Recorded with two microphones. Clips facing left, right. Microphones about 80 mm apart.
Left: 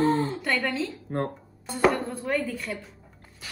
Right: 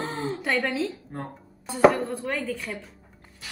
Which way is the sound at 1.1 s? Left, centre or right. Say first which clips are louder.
Left 7 dB; left.